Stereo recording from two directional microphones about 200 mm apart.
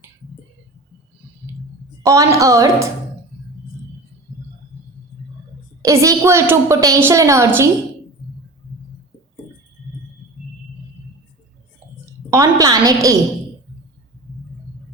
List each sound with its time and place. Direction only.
2.0 s a woman's voice: 15° right (ahead or behind)
5.8 s a woman's voice: 15° right (ahead or behind)
12.3 s a woman's voice: 15° right (ahead or behind)